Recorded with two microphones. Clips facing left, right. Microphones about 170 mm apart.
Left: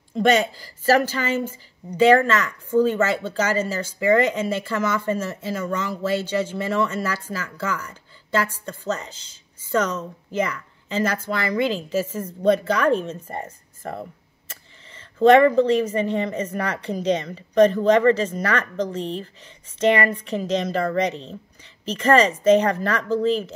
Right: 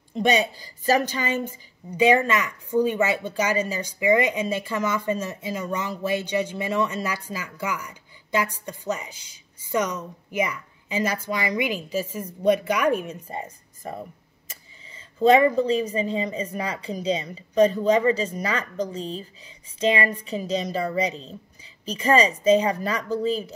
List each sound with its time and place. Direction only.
0.2 s speech: 15° right (ahead or behind)
14.5 s a sound: 10° right (ahead or behind)
15.3 s speech: 10° right (ahead or behind)
20.0 s speech: 15° right (ahead or behind)